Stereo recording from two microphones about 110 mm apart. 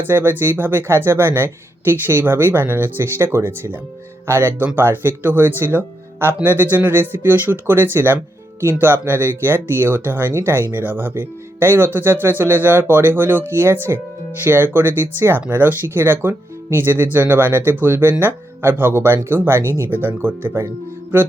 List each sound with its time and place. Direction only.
0.0 s speech: 20° right (ahead or behind)
21.1 s music: 15° right (ahead or behind)